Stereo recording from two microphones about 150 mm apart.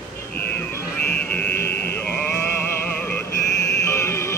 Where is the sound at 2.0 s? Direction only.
10° left (ahead or behind).